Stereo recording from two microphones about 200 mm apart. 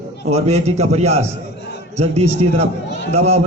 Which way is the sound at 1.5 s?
55° left (ahead or behind).